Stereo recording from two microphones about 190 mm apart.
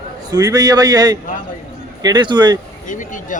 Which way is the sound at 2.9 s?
45° left (ahead or behind).